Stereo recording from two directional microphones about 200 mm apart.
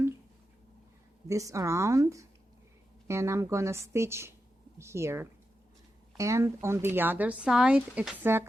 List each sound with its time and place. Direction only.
1.3 s speech: 15° right (ahead or behind)